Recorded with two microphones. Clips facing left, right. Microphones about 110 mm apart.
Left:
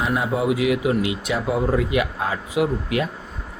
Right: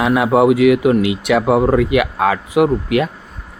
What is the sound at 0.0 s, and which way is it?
Speech, 75° right (ahead or behind).